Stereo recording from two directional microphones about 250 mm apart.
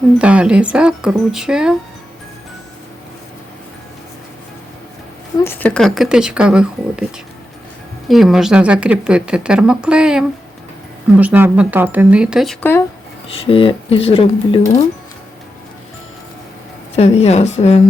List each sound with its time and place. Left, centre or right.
0.2 s speech: centre
5.4 s speech: centre
8.0 s speech: centre
13.3 s speech: left
16.9 s speech: left